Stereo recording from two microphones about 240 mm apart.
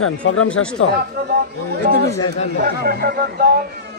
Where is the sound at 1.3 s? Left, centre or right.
Right.